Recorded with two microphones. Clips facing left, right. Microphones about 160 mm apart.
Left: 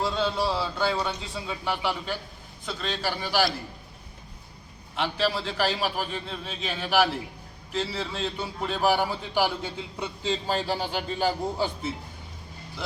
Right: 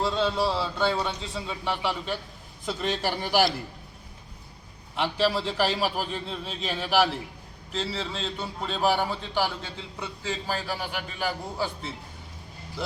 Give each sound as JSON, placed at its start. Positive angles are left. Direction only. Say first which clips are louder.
{"t": 0.0, "sound": "a man's voice", "louder": "right 1 dB", "side_deg": 0}
{"t": 2.6, "sound": "a man's voice", "louder": "right 2 dB", "side_deg": -15}
{"t": 4.9, "sound": "a man's voice", "louder": "right 2 dB", "side_deg": 0}